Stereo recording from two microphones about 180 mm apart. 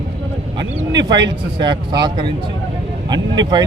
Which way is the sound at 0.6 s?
25° right (ahead or behind).